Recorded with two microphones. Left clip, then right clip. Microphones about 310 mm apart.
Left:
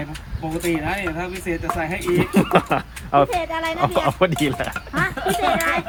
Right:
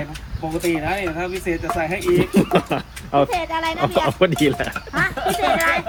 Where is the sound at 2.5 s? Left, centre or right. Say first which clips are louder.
Left 2 dB; left.